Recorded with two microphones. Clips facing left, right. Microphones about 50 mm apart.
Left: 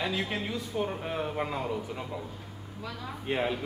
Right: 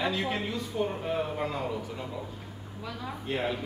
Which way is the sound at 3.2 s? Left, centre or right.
Centre.